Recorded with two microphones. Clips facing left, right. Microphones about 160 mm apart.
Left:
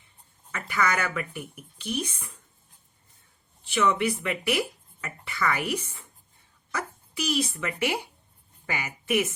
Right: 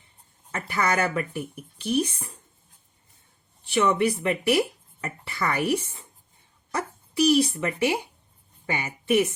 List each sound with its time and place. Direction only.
0.5 s speech: 35° right (ahead or behind)
3.7 s a woman's voice: 35° right (ahead or behind)